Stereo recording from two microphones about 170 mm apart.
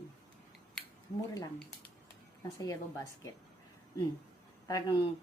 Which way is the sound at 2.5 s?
20° left (ahead or behind).